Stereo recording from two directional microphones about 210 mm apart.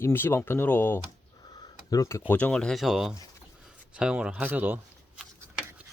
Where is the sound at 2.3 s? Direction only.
5° left (ahead or behind).